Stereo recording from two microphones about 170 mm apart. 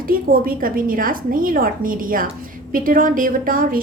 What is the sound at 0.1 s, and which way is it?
A woman's voice, 55° right (ahead or behind).